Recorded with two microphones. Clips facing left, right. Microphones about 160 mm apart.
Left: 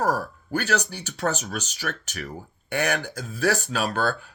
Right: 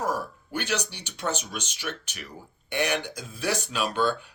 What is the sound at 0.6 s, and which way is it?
Speech, 40° left (ahead or behind).